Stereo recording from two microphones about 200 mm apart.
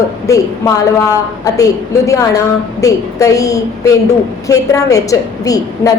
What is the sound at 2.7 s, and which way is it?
A woman's voice, 15° left (ahead or behind).